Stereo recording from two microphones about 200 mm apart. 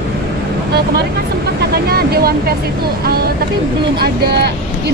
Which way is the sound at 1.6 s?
50° right (ahead or behind).